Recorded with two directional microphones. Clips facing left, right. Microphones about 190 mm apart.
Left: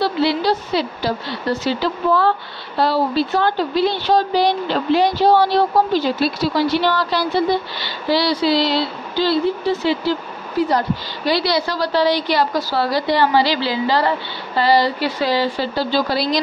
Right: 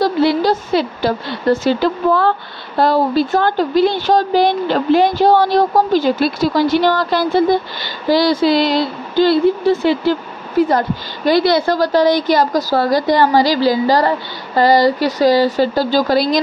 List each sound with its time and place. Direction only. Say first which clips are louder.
0.0 s speech: right 4 dB; 45° right (ahead or behind)
11.2 s speech: right 6 dB; 50° right (ahead or behind)